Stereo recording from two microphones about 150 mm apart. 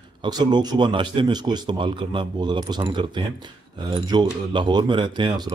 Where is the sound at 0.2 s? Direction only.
30° right (ahead or behind).